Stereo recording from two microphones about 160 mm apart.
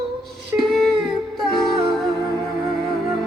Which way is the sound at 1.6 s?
Centre (ahead or behind).